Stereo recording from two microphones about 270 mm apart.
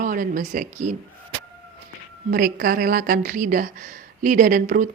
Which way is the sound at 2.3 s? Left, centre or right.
Right.